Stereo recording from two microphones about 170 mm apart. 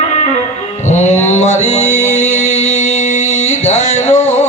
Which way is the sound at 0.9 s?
40° left (ahead or behind).